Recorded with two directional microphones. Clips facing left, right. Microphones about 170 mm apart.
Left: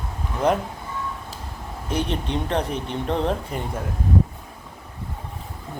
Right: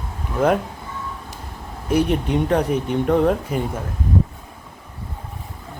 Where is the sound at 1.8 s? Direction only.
10° right (ahead or behind).